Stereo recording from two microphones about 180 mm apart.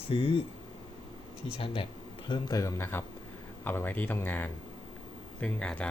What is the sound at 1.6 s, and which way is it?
Speech, 30° left (ahead or behind).